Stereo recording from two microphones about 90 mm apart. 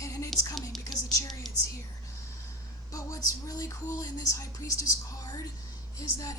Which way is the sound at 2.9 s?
40° left (ahead or behind).